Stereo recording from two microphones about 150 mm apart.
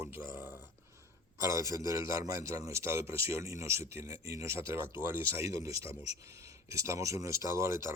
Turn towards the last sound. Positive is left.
turn(degrees=-20)  # may be behind; listen again after turning